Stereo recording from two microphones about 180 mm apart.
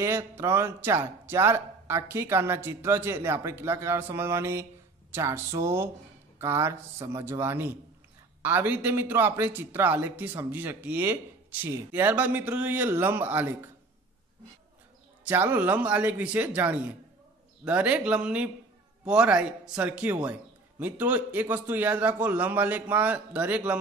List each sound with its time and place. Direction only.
0.0 s speech: 15° right (ahead or behind)
15.2 s speech: 10° right (ahead or behind)